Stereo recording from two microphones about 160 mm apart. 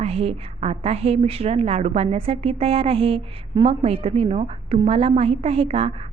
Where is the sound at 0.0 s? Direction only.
40° right (ahead or behind).